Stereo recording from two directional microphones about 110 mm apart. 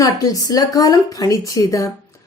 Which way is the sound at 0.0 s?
35° left (ahead or behind).